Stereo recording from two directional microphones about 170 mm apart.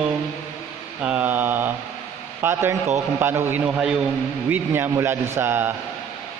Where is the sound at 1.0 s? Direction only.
10° right (ahead or behind).